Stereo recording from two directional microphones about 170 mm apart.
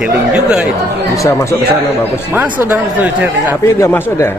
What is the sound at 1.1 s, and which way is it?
Speech, 20° left (ahead or behind).